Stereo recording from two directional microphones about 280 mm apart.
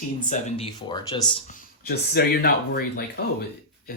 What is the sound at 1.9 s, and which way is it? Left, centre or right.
Speech, left.